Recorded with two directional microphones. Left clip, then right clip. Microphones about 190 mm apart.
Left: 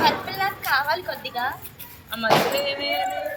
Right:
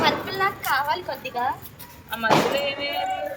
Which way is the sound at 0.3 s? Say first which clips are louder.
Even; 30° right (ahead or behind).